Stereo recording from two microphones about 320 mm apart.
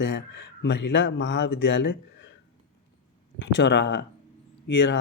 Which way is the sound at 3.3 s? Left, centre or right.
Left.